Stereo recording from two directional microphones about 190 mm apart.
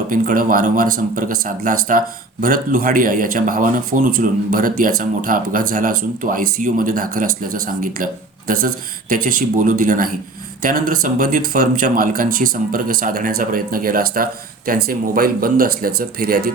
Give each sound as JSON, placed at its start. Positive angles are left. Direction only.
{"t": 0.1, "sound": "speech", "side_deg": -45}